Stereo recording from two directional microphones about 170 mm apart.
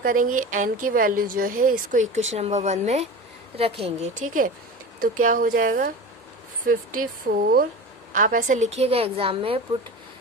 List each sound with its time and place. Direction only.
0.0 s a woman's voice: 55° right (ahead or behind)
7.3 s a woman's voice: 60° right (ahead or behind); by 9.6 s 35° right (ahead or behind)